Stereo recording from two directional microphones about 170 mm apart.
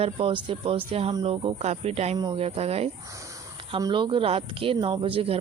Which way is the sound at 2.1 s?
25° right (ahead or behind).